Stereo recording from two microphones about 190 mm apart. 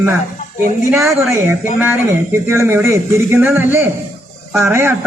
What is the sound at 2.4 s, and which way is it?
A man's voice, 15° right (ahead or behind).